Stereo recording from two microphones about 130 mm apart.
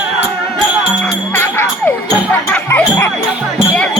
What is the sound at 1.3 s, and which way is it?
Music, 15° left (ahead or behind).